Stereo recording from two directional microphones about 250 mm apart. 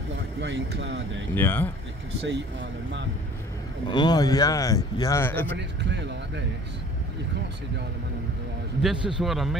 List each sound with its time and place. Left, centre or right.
0.4 s speech: right
1.3 s speech: centre
2.2 s speech: right
3.9 s speech: centre
5.6 s speech: right
9.0 s speech: centre